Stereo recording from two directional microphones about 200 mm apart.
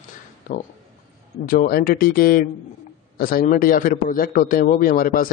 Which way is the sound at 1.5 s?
45° left (ahead or behind).